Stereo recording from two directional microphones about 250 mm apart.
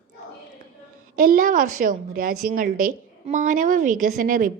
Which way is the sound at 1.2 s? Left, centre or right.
Right.